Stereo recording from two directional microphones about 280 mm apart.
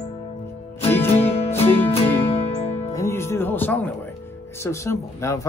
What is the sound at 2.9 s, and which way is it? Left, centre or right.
Music, centre.